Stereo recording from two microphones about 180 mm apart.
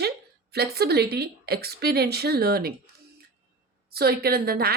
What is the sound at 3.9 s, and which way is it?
Speech, 60° right (ahead or behind).